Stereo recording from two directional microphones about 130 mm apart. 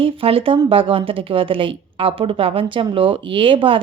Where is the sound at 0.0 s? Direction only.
45° right (ahead or behind).